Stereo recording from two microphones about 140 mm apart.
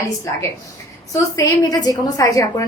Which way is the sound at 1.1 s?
25° left (ahead or behind).